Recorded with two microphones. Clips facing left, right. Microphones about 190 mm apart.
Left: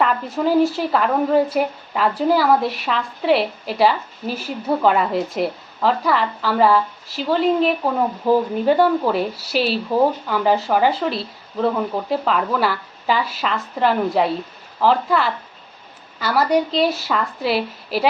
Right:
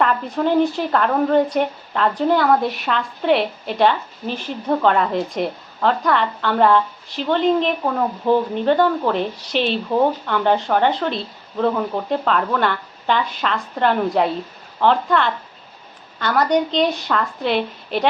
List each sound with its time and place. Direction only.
0.0 s a woman's voice: centre (ahead or behind)